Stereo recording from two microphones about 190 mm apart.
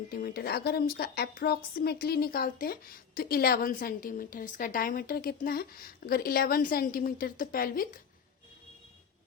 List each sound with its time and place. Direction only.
0.1 s a woman's voice: 55° left (ahead or behind)